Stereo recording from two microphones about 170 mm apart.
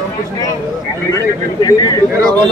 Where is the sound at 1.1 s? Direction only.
20° left (ahead or behind).